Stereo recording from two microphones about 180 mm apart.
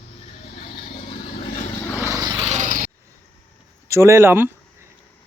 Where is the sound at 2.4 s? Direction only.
40° right (ahead or behind).